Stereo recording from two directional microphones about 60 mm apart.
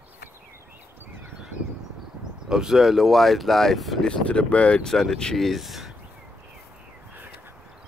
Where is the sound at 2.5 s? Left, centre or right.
Centre.